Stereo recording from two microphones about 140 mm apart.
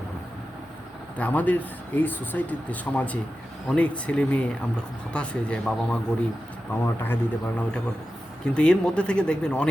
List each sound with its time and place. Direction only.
1.2 s speech: 10° left (ahead or behind)